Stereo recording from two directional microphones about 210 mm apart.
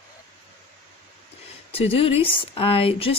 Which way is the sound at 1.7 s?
25° left (ahead or behind).